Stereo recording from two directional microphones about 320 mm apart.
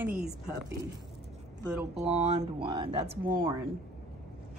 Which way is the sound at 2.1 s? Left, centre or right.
Right.